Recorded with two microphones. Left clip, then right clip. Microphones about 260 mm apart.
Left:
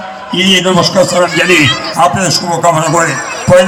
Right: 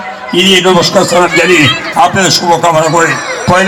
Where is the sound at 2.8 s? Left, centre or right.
Right.